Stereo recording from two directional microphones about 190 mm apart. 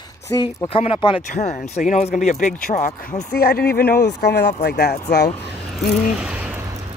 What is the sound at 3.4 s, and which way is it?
Speech, 55° left (ahead or behind).